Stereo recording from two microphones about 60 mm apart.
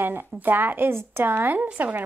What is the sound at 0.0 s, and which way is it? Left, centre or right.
A woman's voice, right.